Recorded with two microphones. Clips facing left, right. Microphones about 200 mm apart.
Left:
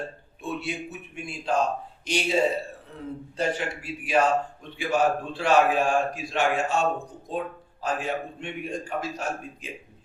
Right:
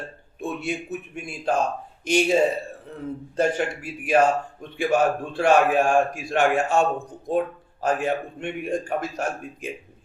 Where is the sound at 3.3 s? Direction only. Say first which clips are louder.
Right 5 dB; 50° right (ahead or behind).